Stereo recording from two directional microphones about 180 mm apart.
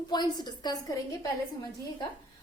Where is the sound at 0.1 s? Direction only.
25° left (ahead or behind).